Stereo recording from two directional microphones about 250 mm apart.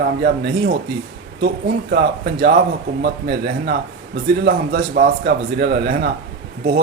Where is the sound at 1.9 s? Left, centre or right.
Right.